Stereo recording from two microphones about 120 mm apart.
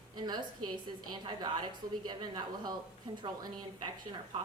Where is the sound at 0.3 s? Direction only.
35° right (ahead or behind).